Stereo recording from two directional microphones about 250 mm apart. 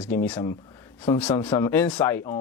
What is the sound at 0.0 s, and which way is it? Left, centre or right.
Speech, centre.